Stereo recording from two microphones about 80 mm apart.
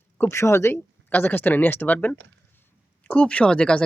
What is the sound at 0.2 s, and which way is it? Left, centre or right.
Speech, left.